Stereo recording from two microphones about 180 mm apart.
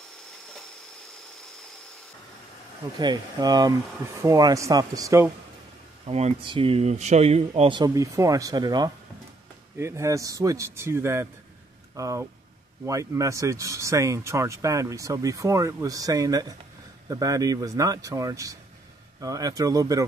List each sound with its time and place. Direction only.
3.0 s speech: 25° right (ahead or behind)
6.0 s speech: 35° right (ahead or behind); by 20.1 s 20° right (ahead or behind)